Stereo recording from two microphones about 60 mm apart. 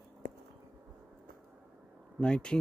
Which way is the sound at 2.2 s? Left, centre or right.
Centre.